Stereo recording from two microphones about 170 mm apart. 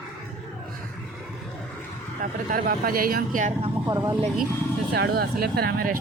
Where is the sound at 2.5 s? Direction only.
60° right (ahead or behind).